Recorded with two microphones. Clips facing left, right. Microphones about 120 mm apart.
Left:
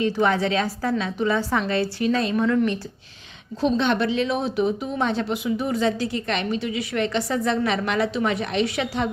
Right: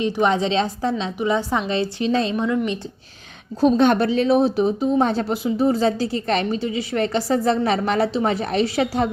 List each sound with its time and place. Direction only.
0.0 s a woman's voice: 20° right (ahead or behind)
2.3 s a woman's voice: 15° right (ahead or behind)
3.6 s speech: 45° right (ahead or behind)